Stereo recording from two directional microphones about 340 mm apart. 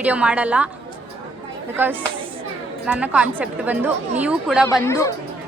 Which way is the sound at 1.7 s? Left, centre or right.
Centre.